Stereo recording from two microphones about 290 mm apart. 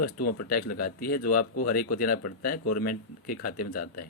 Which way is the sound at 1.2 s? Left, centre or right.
Left.